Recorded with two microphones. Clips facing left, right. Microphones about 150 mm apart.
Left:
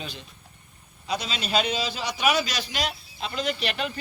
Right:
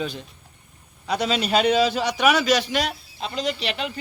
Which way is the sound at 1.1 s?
60° right (ahead or behind).